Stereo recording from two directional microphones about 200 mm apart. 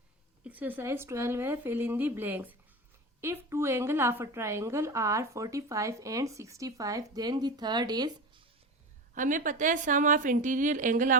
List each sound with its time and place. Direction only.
0.4 s a woman's voice: 10° right (ahead or behind)
9.1 s a woman's voice: 40° right (ahead or behind)